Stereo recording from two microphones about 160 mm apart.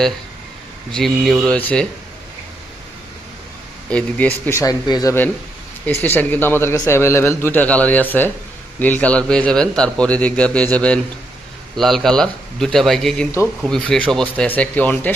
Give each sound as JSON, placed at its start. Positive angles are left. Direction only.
{"t": 0.9, "sound": "a man's voice", "side_deg": 0}
{"t": 3.8, "sound": "a man's voice", "side_deg": 5}
{"t": 5.8, "sound": "a man's voice", "side_deg": 10}